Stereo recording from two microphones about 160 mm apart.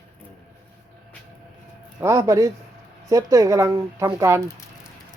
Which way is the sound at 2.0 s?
20° right (ahead or behind).